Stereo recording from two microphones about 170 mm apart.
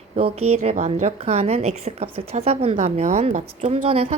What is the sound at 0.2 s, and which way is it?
Speech, 35° right (ahead or behind).